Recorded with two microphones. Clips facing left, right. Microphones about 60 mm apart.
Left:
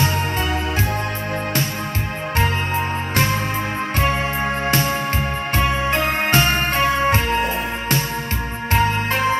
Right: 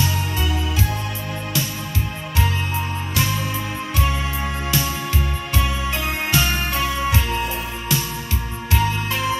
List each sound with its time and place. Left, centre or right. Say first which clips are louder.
4.0 s music: left 4 dB; left
8.7 s music: left 4 dB; left